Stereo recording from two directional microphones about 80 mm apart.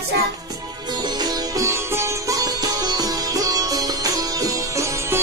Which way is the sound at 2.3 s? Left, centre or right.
Right.